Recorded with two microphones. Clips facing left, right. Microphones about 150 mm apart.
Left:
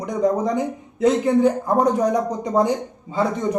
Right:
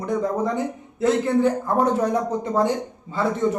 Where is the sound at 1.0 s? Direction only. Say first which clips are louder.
Left 3 dB; 15° left (ahead or behind).